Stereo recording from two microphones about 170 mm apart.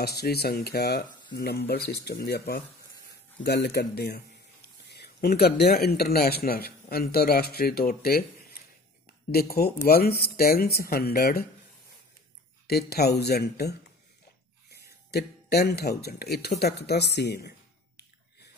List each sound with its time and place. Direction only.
0.0 s speech: 70° left (ahead or behind)
12.6 s speech: 70° left (ahead or behind)
15.0 s speech: 70° left (ahead or behind)